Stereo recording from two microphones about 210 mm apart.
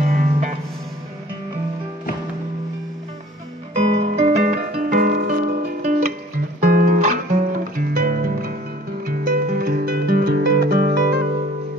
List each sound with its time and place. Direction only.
0.0 s music: 40° right (ahead or behind)
3.7 s music: 30° right (ahead or behind)
4.4 s music: 45° right (ahead or behind)